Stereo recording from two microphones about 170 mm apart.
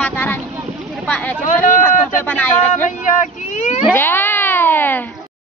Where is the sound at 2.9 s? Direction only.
45° left (ahead or behind).